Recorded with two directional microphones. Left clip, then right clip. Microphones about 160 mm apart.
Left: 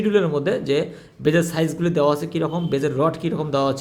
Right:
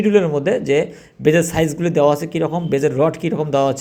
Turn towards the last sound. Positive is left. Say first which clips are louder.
# right 4 dB
turn(degrees=-10)  # may be behind; listen again after turning